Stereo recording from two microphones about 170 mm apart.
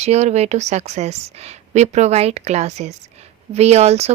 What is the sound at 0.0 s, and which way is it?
A woman's voice, 40° right (ahead or behind).